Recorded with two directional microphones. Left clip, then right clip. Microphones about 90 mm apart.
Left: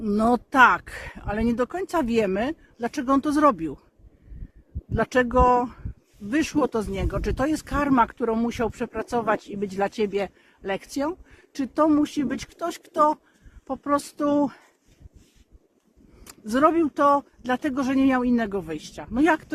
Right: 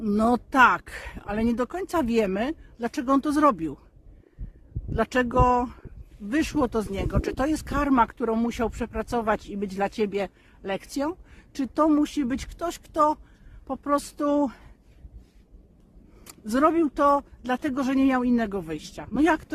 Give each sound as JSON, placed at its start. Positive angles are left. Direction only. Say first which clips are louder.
{"t": 0.0, "sound": "speech", "louder": "left 1 dB", "side_deg": -30}
{"t": 4.9, "sound": "speech", "louder": "left 2 dB", "side_deg": -30}
{"t": 16.2, "sound": "speech", "louder": "left 2 dB", "side_deg": -25}